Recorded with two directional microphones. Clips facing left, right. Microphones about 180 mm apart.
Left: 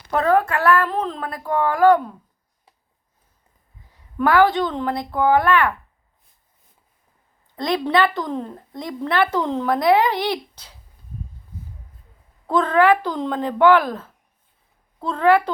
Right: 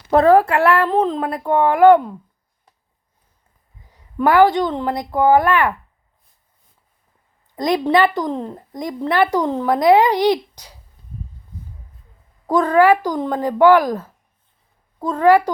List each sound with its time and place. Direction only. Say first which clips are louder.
0.1 s a woman's voice: right 6 dB; 35° right (ahead or behind)
3.9 s a woman's voice: right 3 dB; 20° right (ahead or behind)
7.5 s a woman's voice: right 4 dB; 15° right (ahead or behind)
12.5 s a woman's voice: right 3 dB; 10° right (ahead or behind)